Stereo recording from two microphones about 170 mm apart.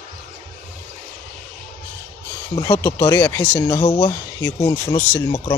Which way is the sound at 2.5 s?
20° left (ahead or behind).